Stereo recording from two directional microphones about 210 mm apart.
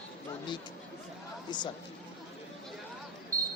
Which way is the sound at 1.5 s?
20° left (ahead or behind).